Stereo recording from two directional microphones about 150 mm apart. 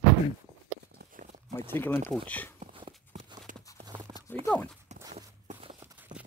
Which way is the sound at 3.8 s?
25° right (ahead or behind).